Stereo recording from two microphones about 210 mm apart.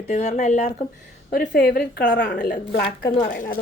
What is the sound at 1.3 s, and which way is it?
A woman's voice, 45° left (ahead or behind).